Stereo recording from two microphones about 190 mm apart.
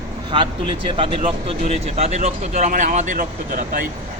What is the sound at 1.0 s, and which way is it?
Speech, 30° right (ahead or behind).